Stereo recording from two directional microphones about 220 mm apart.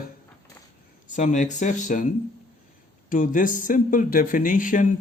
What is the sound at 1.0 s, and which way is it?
Speech, 35° left (ahead or behind).